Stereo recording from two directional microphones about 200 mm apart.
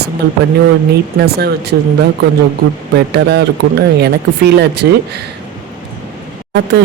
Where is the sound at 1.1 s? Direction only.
55° right (ahead or behind).